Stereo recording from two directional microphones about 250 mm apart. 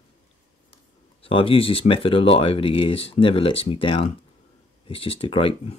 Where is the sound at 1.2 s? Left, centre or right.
Left.